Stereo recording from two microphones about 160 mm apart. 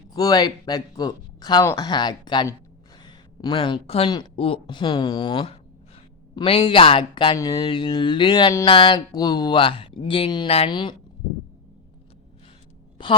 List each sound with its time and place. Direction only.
0.1 s speech: 25° left (ahead or behind)